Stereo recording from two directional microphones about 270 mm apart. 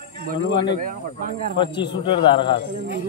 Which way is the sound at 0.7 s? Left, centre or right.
Right.